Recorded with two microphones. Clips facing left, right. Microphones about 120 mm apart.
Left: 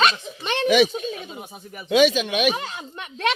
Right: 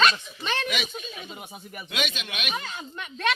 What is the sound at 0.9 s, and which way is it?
Speech, 40° left (ahead or behind).